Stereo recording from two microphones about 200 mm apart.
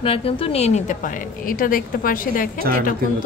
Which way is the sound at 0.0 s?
30° left (ahead or behind).